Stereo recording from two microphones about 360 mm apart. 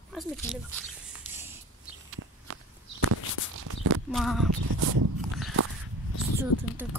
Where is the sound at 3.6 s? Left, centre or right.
Right.